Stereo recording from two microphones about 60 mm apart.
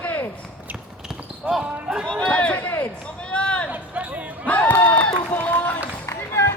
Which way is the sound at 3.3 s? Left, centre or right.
Centre.